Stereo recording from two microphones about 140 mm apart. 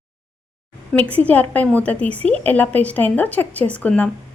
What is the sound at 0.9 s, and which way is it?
A woman's voice, 10° left (ahead or behind).